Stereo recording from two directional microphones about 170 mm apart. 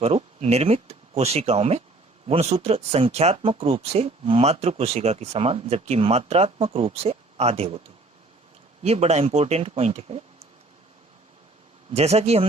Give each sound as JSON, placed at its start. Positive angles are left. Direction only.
{"t": 0.0, "sound": "speech", "side_deg": -35}
{"t": 8.8, "sound": "speech", "side_deg": -40}
{"t": 11.9, "sound": "speech", "side_deg": -40}